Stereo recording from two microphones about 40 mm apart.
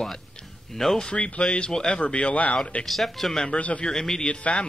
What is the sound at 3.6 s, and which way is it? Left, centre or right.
Speech, left.